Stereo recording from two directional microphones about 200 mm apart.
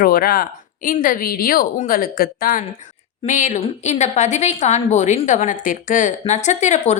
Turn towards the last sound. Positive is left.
turn(degrees=35)  # may be behind; listen again after turning